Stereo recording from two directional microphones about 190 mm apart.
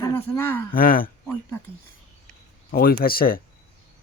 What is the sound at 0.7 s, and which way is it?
Speech, 50° left (ahead or behind).